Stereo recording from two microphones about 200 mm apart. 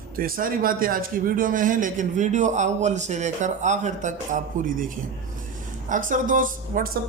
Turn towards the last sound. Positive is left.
turn(degrees=-45)  # may be behind; listen again after turning